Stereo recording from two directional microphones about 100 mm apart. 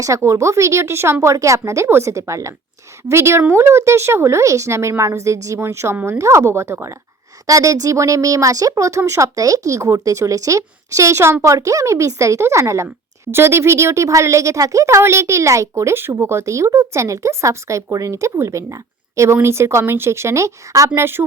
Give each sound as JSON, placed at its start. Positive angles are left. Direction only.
{"t": 0.0, "sound": "speech", "side_deg": -30}